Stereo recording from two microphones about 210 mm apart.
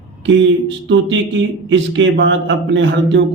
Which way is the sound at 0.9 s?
60° right (ahead or behind).